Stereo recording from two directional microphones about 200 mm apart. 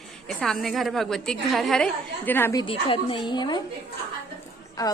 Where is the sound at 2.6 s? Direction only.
25° left (ahead or behind).